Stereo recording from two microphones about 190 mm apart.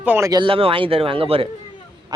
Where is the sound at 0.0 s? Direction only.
10° right (ahead or behind).